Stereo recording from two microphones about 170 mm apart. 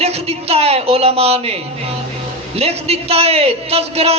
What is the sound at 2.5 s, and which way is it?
Speech, 35° right (ahead or behind).